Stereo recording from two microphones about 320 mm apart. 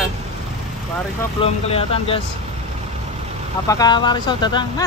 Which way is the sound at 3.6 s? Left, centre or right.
Centre.